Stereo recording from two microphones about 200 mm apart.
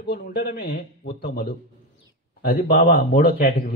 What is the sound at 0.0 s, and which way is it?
A man's voice, 50° left (ahead or behind).